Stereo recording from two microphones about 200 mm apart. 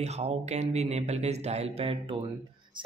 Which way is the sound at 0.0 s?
35° right (ahead or behind).